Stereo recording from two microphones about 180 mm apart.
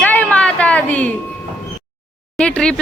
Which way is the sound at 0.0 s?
10° left (ahead or behind).